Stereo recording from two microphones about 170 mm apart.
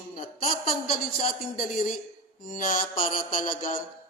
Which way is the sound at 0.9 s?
55° left (ahead or behind).